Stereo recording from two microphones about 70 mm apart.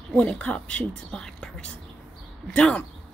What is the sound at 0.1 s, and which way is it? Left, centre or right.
A woman's voice, centre.